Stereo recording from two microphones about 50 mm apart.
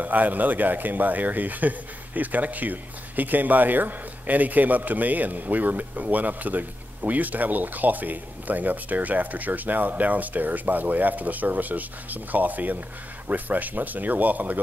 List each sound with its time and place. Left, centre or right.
0.0 s speech: right